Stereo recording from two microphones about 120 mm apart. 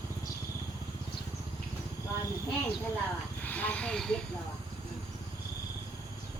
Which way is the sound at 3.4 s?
15° left (ahead or behind).